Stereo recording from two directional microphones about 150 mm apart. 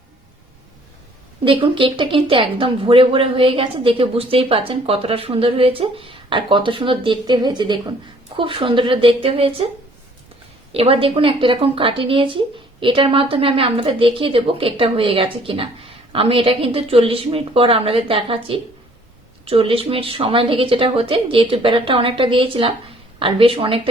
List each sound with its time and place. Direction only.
1.5 s speech: 35° right (ahead or behind)
10.7 s speech: 40° right (ahead or behind)